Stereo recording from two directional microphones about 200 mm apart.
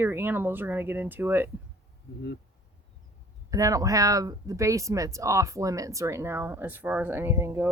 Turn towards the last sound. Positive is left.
turn(degrees=-10)  # may be behind; listen again after turning